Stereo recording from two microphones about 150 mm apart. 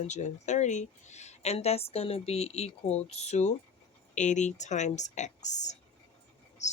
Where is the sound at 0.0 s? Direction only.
50° left (ahead or behind).